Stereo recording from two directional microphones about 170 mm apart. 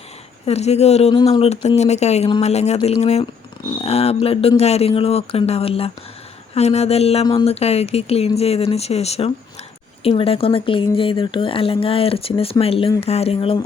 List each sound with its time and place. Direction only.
0.4 s speech: 40° left (ahead or behind)